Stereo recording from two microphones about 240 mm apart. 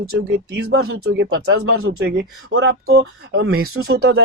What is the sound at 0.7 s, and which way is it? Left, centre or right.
Speech, right.